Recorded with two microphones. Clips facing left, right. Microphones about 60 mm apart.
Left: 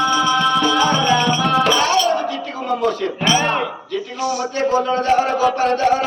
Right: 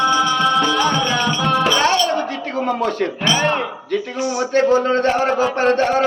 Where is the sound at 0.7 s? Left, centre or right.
Centre.